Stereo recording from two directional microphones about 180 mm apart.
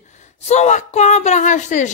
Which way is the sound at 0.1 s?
40° left (ahead or behind).